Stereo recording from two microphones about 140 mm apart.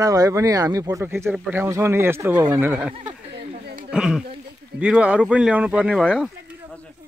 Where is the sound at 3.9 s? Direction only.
5° right (ahead or behind).